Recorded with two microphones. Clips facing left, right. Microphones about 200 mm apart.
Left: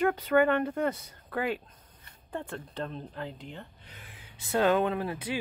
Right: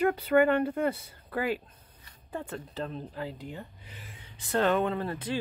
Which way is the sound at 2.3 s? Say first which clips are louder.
Even; 5° right (ahead or behind).